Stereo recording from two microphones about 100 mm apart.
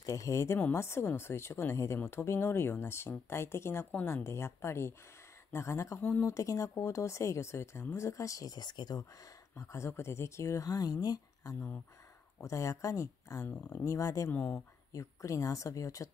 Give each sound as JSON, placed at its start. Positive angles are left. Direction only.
{"t": 0.0, "sound": "speech", "side_deg": 30}
{"t": 6.0, "sound": "speech", "side_deg": 20}
{"t": 6.3, "sound": "speech", "side_deg": 30}
{"t": 9.6, "sound": "speech", "side_deg": 30}
{"t": 13.5, "sound": "speech", "side_deg": 20}
{"t": 13.9, "sound": "speech", "side_deg": 35}
{"t": 14.3, "sound": "speech", "side_deg": 10}
{"t": 14.9, "sound": "speech", "side_deg": 35}